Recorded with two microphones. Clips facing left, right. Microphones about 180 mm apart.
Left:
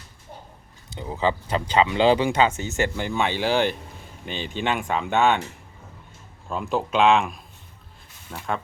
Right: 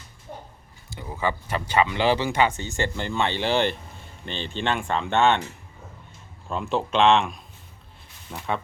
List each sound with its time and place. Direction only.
0.9 s speech: 20° left (ahead or behind); by 5.4 s 5° left (ahead or behind)
6.5 s speech: centre (ahead or behind)